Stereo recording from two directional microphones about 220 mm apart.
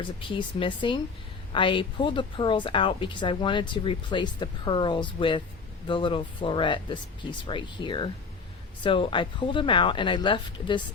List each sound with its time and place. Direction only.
0.0 s a woman's voice: 20° left (ahead or behind)